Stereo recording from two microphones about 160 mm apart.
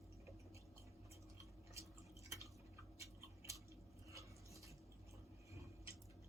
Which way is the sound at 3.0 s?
20° right (ahead or behind).